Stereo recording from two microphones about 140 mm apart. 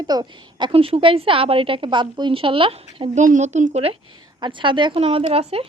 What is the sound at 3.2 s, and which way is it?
Speech, 60° right (ahead or behind).